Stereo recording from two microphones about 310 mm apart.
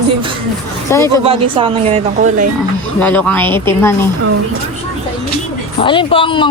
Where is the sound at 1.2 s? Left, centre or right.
Centre.